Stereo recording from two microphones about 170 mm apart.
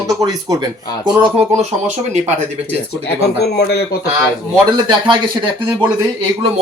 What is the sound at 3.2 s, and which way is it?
Speech, 75° left (ahead or behind).